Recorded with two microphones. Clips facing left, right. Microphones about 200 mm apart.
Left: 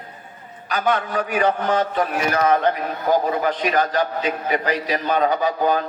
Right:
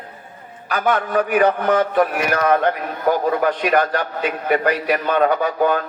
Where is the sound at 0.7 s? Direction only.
55° right (ahead or behind).